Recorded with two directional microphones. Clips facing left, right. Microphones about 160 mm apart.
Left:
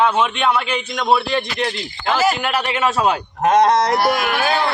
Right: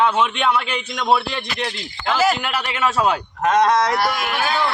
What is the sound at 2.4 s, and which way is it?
Speech, 20° left (ahead or behind).